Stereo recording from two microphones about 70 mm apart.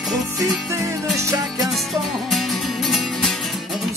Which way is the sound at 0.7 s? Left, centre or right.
Right.